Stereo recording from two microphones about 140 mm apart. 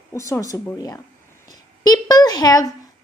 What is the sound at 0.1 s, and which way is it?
A woman's voice, 20° left (ahead or behind).